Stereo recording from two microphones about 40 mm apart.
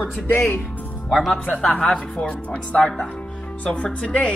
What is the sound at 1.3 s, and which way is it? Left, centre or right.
Speech, left.